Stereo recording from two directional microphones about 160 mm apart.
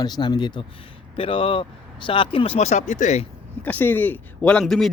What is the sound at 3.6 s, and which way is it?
A man's voice, 10° left (ahead or behind).